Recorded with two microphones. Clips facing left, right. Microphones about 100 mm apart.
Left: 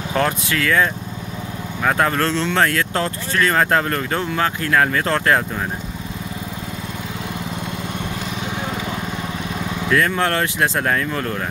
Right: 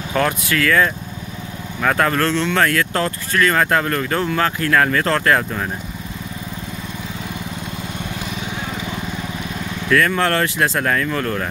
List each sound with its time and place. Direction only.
0.1 s speech: 25° left (ahead or behind)
9.8 s speech: 20° left (ahead or behind)